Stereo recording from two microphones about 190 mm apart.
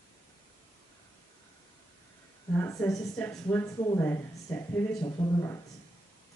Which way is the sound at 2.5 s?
15° left (ahead or behind).